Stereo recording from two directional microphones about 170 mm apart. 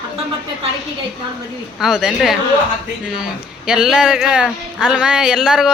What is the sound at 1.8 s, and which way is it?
A man's voice, 5° right (ahead or behind).